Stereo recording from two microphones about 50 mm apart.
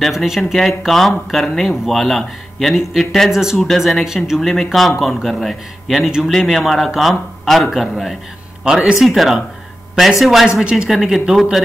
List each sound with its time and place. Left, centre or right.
0.2 s a man's voice: centre
3.3 s speech: centre
3.5 s a man's voice: centre
4.0 s a man's voice: centre
9.0 s a man's voice: centre
10.6 s speech: centre
10.9 s speech: centre